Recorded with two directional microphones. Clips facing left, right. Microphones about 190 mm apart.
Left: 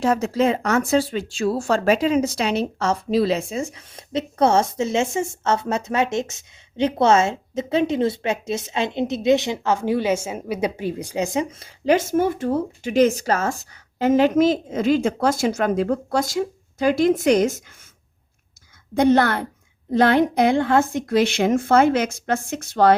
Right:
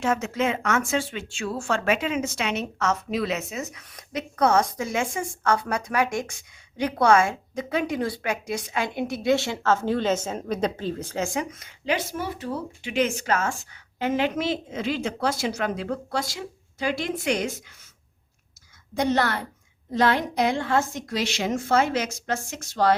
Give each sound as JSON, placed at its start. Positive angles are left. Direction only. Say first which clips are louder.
{"t": 0.0, "sound": "speech", "louder": "left 5 dB", "side_deg": 35}
{"t": 11.9, "sound": "speech", "louder": "left 9 dB", "side_deg": 45}
{"t": 18.9, "sound": "a woman's voice", "louder": "left 7 dB", "side_deg": 55}